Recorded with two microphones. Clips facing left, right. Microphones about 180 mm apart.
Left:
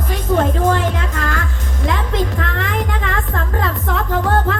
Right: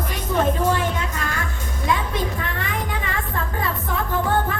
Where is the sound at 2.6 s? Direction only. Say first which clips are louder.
Left 5 dB; 90° left.